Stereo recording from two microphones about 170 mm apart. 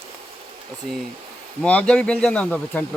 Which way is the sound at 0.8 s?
Centre (ahead or behind).